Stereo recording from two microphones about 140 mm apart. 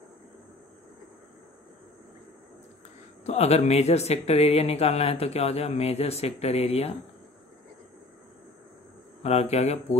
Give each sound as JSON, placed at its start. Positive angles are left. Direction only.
{"t": 3.3, "sound": "speech", "side_deg": 50}
{"t": 9.2, "sound": "speech", "side_deg": 50}